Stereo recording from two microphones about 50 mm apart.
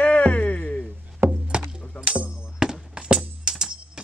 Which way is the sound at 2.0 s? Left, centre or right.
Right.